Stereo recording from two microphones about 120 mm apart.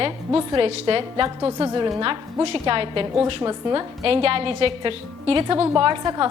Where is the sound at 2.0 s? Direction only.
45° right (ahead or behind).